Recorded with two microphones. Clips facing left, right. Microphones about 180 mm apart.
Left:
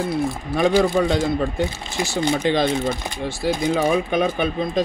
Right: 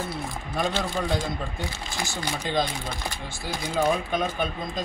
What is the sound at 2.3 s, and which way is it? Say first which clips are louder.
Speech: left 7 dB; 75° left (ahead or behind).